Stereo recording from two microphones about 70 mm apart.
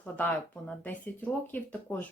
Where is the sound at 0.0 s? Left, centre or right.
Left.